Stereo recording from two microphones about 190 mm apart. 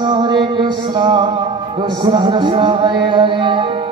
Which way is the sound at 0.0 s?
25° right (ahead or behind).